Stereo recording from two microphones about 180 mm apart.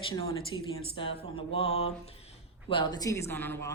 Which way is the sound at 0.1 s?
30° left (ahead or behind).